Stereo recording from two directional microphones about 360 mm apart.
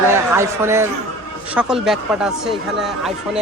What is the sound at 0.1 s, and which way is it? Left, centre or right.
A man's voice, centre.